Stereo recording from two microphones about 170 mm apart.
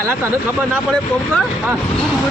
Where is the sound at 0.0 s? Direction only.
15° right (ahead or behind).